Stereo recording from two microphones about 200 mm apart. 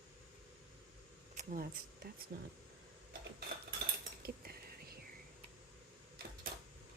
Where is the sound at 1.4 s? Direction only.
45° right (ahead or behind).